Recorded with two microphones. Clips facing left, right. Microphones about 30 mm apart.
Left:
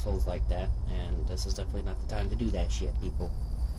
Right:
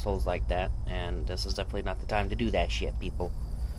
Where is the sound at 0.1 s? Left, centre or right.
Right.